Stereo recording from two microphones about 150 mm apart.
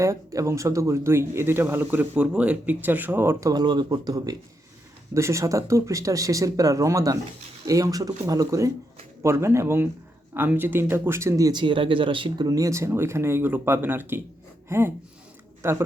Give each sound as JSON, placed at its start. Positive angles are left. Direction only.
{"t": 0.0, "sound": "speech", "side_deg": -20}
{"t": 3.5, "sound": "speech", "side_deg": -30}